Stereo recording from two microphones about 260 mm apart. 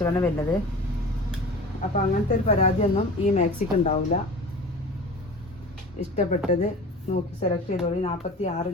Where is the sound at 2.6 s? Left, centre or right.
Left.